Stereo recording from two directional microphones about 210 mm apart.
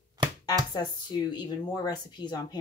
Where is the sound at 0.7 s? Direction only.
20° left (ahead or behind).